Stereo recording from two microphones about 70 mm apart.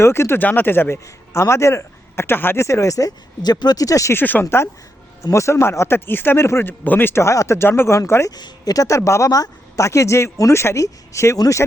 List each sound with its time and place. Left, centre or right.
0.0 s speech: left
2.6 s speech: left
3.4 s speech: left
4.1 s speech: left
8.4 s speech: left
9.0 s speech: left